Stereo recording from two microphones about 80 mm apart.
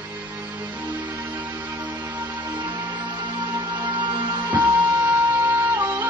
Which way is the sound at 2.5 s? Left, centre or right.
Right.